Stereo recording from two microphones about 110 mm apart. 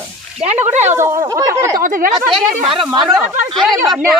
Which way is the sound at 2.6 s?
55° right (ahead or behind).